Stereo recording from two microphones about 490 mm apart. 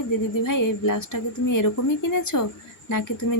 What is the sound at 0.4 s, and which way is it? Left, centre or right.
Speech, left.